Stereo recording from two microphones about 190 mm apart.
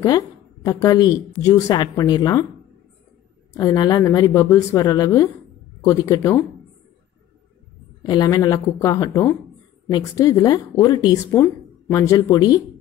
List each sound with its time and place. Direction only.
0.7 s speech: 15° left (ahead or behind)
3.5 s speech: 20° left (ahead or behind)
8.1 s speech: 20° left (ahead or behind)